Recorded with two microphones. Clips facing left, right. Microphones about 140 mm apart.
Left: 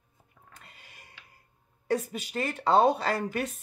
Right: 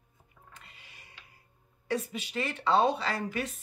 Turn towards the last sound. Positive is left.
turn(degrees=50)  # may be behind; listen again after turning